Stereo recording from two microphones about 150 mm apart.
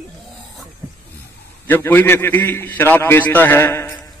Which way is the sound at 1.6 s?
15° left (ahead or behind).